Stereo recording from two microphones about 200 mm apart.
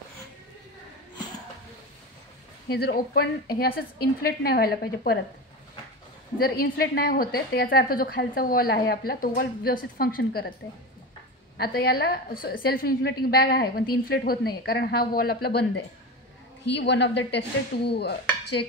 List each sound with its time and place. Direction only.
2.7 s a woman's voice: 50° left (ahead or behind)
6.4 s a woman's voice: 50° left (ahead or behind)
11.5 s a woman's voice: 50° left (ahead or behind)
16.6 s dishes: 60° left (ahead or behind)